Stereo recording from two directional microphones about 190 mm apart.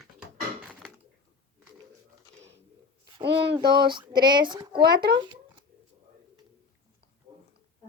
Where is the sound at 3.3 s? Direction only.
65° right (ahead or behind).